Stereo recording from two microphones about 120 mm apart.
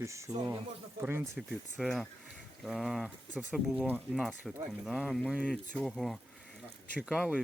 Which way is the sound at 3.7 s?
15° right (ahead or behind).